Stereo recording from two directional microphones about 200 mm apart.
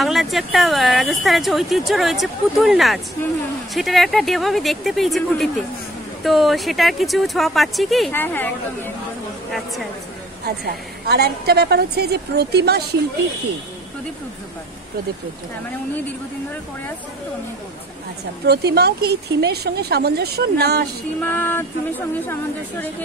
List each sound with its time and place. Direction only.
0.0 s speech: centre (ahead or behind)
10.4 s a woman's voice: 55° right (ahead or behind)
18.5 s a woman's voice: 55° right (ahead or behind)
21.2 s speech: 10° left (ahead or behind)